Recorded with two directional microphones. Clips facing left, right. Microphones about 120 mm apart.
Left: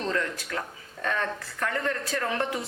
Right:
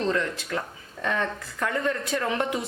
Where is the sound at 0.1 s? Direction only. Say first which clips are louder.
Right 3 dB; 20° right (ahead or behind).